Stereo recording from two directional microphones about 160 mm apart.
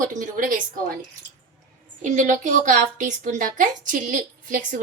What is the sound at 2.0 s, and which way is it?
A woman's voice, 50° right (ahead or behind).